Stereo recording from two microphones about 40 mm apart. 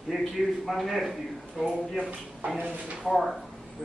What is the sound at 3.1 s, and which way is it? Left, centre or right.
Speech, centre.